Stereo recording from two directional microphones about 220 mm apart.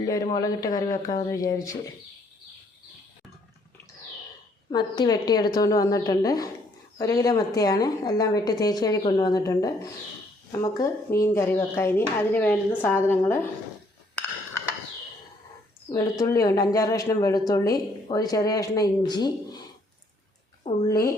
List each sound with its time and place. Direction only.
0.0 s speech: 15° left (ahead or behind)
4.7 s speech: 20° left (ahead or behind)
15.9 s speech: 15° left (ahead or behind)
20.7 s speech: 15° left (ahead or behind)